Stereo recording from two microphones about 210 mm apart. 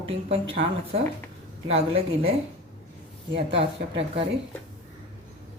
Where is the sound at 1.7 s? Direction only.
30° right (ahead or behind).